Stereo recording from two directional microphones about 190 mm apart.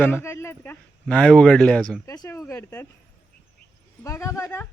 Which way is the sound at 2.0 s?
20° left (ahead or behind).